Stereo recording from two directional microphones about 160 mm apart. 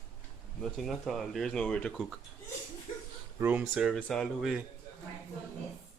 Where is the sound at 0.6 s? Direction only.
Centre (ahead or behind).